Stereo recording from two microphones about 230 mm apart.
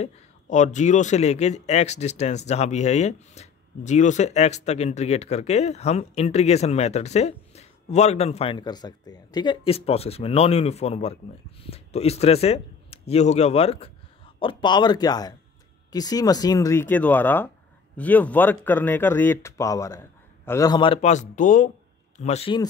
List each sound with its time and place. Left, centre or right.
0.0 s a man's voice: left